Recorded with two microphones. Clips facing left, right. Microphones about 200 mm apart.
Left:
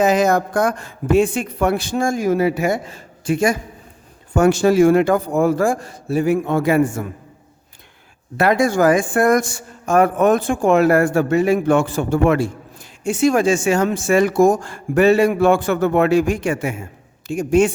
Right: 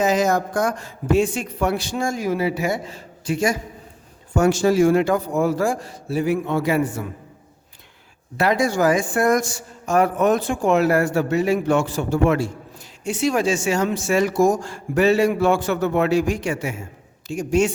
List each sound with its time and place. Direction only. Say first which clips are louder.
0.0 s a man's voice: left 3 dB; 60° left (ahead or behind)
8.4 s a man's voice: left 3 dB; 55° left (ahead or behind)